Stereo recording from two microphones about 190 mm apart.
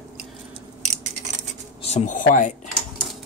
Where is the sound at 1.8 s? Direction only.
35° left (ahead or behind).